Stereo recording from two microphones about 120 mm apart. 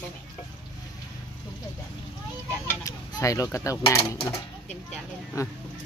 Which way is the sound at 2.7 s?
30° left (ahead or behind).